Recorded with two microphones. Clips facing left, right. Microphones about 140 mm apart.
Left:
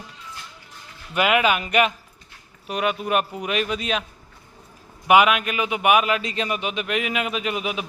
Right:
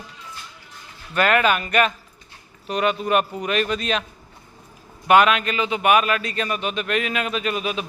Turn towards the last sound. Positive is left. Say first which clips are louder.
# right 1 dB
turn(degrees=15)  # may be behind; listen again after turning